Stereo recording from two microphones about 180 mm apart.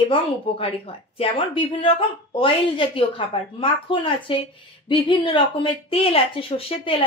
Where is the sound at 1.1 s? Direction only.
30° left (ahead or behind).